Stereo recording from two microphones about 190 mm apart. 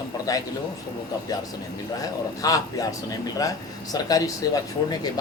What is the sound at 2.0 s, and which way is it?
Speech, 20° left (ahead or behind).